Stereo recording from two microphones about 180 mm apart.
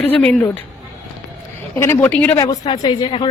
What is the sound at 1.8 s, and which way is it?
Speech, 10° left (ahead or behind).